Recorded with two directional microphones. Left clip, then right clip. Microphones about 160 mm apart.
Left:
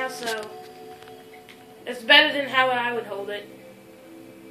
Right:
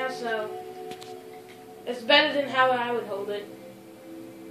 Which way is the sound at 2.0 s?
15° left (ahead or behind).